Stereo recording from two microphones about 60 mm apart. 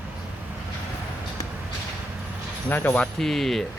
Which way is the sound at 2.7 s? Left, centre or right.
Left.